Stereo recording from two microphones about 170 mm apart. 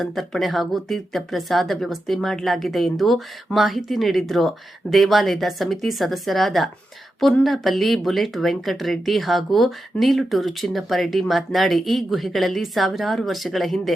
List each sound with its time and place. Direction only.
0.0 s speech: centre (ahead or behind)